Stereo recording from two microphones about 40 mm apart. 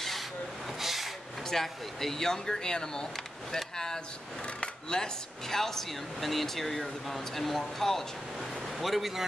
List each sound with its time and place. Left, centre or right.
0.7 s vehicle: centre
1.5 s speech: centre
5.6 s speech: centre